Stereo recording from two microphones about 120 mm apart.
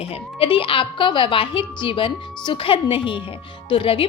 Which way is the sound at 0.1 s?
50° left (ahead or behind).